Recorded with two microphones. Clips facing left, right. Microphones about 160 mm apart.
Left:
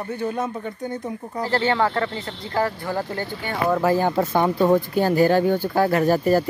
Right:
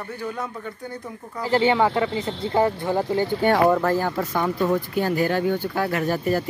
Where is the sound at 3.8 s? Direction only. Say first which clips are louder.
Left 3 dB; 10° left (ahead or behind).